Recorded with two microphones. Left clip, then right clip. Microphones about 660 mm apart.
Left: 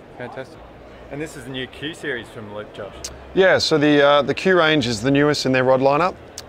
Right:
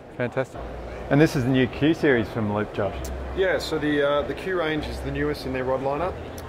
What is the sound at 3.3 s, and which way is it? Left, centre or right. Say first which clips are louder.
Speech: left 9 dB; left.